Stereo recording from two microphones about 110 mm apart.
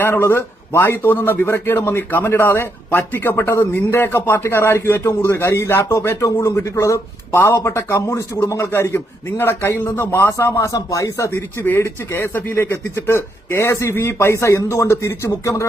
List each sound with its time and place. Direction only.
0.0 s a man's voice: 20° left (ahead or behind)
11.3 s a man's voice: 20° left (ahead or behind)